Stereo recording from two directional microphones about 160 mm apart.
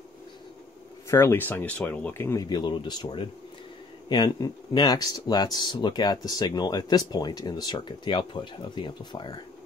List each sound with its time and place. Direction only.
1.0 s speech: 15° left (ahead or behind)